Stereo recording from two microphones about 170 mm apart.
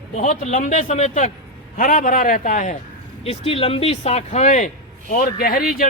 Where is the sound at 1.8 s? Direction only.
55° left (ahead or behind).